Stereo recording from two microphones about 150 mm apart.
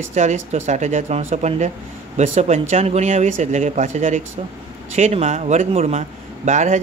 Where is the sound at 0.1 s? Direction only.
50° right (ahead or behind).